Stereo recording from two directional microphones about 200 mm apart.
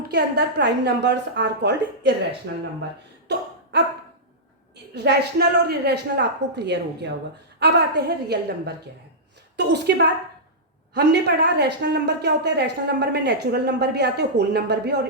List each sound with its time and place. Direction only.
0.1 s a woman's voice: 60° right (ahead or behind)
3.2 s cough: 60° right (ahead or behind)
4.9 s a woman's voice: 55° right (ahead or behind)
10.9 s a woman's voice: 55° right (ahead or behind)